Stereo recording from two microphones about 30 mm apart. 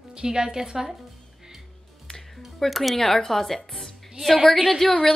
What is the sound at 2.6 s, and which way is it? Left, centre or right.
A woman's voice, centre.